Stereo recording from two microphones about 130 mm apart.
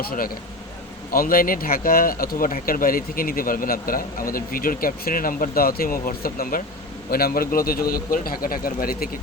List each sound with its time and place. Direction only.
1.2 s speech: 90° left